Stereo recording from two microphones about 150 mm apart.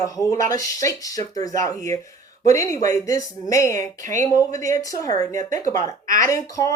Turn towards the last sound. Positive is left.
turn(degrees=20)  # may be behind; listen again after turning